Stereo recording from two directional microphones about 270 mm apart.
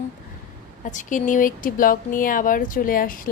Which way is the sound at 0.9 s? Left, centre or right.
Left.